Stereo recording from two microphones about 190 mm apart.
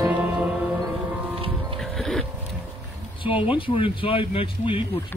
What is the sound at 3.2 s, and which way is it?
Speech, 25° left (ahead or behind).